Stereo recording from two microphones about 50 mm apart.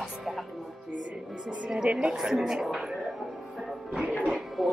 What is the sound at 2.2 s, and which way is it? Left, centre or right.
Speech, centre.